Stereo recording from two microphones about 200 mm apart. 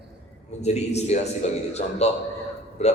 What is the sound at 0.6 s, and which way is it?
A man's voice, 35° left (ahead or behind).